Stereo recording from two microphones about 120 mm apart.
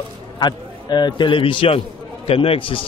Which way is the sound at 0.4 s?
35° left (ahead or behind).